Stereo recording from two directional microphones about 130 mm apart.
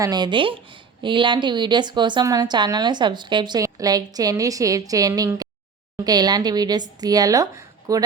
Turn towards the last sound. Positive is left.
turn(degrees=-25)  # may be behind; listen again after turning